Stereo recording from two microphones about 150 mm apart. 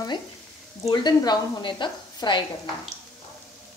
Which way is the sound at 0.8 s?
30° left (ahead or behind).